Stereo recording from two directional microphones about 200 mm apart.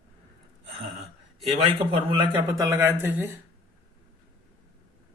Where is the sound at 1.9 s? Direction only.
25° right (ahead or behind).